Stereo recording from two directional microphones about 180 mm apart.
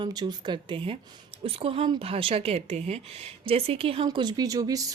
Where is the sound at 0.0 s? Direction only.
25° right (ahead or behind).